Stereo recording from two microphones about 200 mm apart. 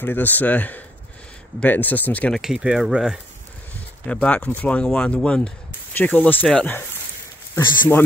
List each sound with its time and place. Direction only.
0.0 s speech: 10° left (ahead or behind)